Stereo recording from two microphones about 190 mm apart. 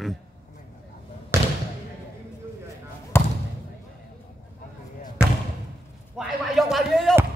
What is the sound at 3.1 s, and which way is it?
Basketball bounce, 10° left (ahead or behind).